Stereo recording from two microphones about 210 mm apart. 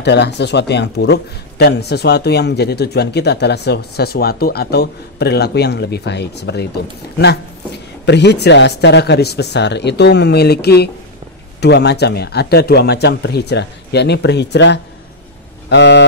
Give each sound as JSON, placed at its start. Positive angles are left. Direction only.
{"t": 0.0, "sound": "speech", "side_deg": 55}
{"t": 15.7, "sound": "vehicle", "side_deg": 55}